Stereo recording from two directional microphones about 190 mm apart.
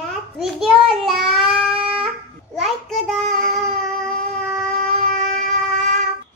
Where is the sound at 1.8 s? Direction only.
5° right (ahead or behind).